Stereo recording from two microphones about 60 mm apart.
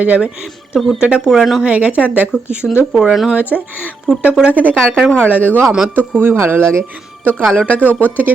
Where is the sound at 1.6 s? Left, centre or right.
Right.